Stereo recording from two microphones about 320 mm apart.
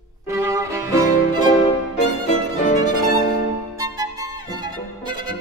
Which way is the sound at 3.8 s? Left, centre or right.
Centre.